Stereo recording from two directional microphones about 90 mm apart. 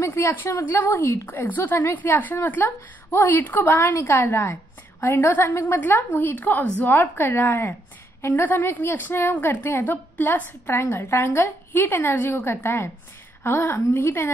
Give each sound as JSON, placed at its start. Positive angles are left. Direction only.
{"t": 0.0, "sound": "a woman's voice", "side_deg": 30}